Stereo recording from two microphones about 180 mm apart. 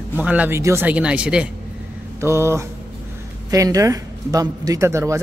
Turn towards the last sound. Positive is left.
turn(degrees=-15)  # may be behind; listen again after turning